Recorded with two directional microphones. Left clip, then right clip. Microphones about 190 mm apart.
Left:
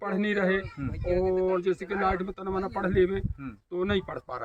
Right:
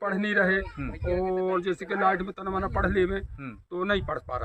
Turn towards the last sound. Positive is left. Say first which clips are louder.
# right 3 dB
turn(degrees=-15)  # may be behind; listen again after turning